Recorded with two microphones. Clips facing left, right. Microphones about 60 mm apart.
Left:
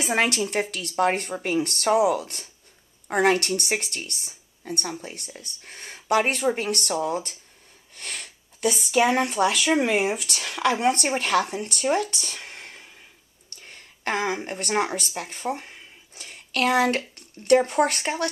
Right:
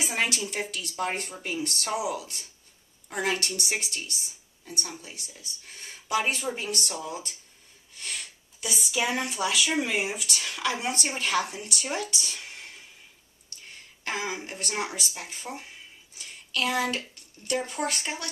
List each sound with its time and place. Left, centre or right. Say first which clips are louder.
0.0 s a woman's voice: left 6 dB; left
14.0 s a woman's voice: left 6 dB; left